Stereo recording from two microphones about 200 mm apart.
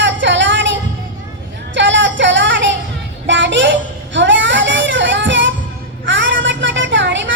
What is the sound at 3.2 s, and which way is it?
Child singing, 65° right (ahead or behind).